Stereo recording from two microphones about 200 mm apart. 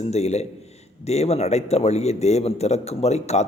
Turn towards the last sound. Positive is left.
turn(degrees=35)  # may be behind; listen again after turning